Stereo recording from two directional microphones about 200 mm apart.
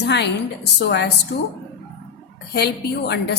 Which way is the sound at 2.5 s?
55° left (ahead or behind).